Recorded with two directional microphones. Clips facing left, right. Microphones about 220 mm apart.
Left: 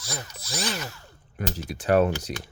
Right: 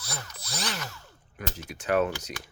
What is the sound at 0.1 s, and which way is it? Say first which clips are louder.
Drill: left 4 dB; 15° left (ahead or behind).